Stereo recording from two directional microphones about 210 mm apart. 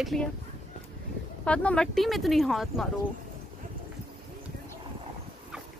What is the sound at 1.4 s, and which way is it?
A woman's voice, 5° left (ahead or behind).